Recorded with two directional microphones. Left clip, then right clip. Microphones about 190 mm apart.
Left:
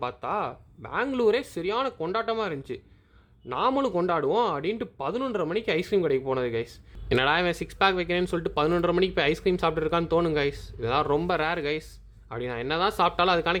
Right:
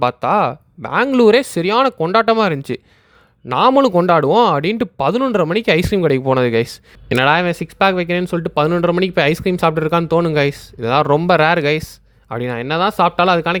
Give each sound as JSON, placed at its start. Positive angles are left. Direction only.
{"t": 0.0, "sound": "speech", "side_deg": -50}